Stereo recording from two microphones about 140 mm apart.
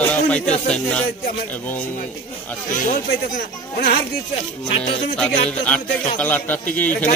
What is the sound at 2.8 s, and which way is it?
Speech, 85° left.